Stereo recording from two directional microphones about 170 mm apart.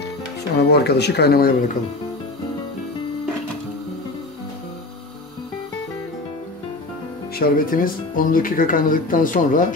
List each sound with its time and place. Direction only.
0.6 s speech: 70° left (ahead or behind)
7.3 s speech: 60° left (ahead or behind)